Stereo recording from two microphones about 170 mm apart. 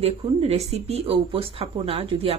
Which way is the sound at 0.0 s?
35° right (ahead or behind).